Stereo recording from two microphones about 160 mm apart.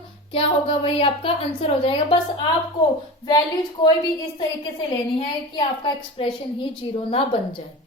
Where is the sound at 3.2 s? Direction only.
25° left (ahead or behind).